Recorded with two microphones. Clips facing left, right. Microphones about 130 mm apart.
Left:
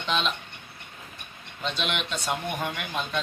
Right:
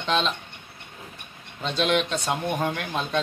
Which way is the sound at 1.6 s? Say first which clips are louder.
Right 7 dB; 35° right (ahead or behind).